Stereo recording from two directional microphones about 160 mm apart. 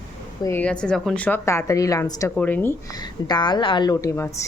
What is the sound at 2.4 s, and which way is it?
Speech, 10° left (ahead or behind).